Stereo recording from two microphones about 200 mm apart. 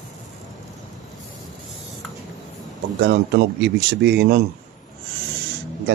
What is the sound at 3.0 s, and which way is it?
A man's voice, 60° right (ahead or behind).